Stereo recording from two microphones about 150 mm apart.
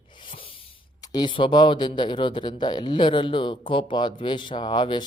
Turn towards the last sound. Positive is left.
turn(degrees=30)  # may be behind; listen again after turning